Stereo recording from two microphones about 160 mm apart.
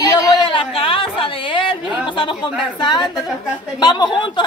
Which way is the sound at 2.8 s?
30° left (ahead or behind).